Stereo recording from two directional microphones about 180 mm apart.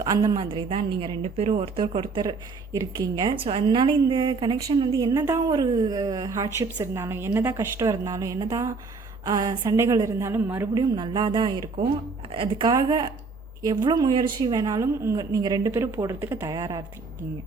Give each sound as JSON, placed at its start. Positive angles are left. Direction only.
{"t": 0.0, "sound": "a woman's voice", "side_deg": -20}
{"t": 0.3, "sound": "a woman's voice", "side_deg": -30}
{"t": 10.9, "sound": "a woman's voice", "side_deg": -25}